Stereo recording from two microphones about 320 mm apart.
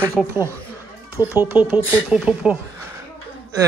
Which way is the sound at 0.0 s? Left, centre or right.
Centre.